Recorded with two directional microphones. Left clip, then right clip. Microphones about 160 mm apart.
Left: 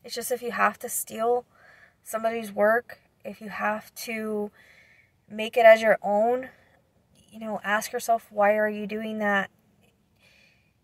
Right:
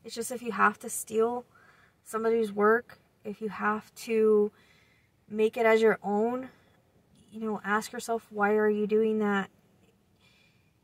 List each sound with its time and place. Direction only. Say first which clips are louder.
0.0 s speech: left 6 dB; 10° left (ahead or behind)